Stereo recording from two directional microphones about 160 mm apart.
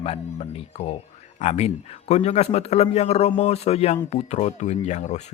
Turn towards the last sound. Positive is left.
turn(degrees=45)  # may be behind; listen again after turning